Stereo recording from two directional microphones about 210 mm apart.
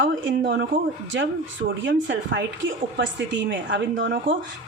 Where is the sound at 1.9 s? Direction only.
60° right (ahead or behind).